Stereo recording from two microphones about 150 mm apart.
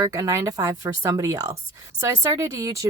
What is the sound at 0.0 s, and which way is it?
Speech, 20° right (ahead or behind).